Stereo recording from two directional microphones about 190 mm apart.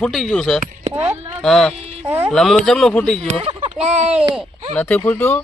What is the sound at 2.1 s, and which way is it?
Speech, 10° right (ahead or behind).